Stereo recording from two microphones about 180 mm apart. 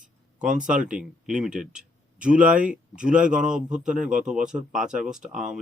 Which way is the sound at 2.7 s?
5° right (ahead or behind).